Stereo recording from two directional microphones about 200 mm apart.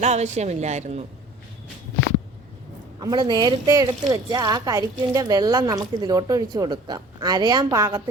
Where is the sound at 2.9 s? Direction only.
20° right (ahead or behind).